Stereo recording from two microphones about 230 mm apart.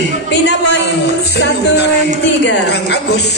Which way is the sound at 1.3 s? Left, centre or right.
Left.